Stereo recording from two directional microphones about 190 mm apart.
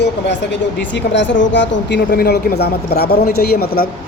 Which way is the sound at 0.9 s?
70° left (ahead or behind).